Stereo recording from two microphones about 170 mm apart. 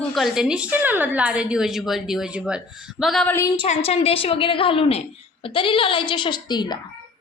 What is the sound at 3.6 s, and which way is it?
A woman's voice, 35° left (ahead or behind).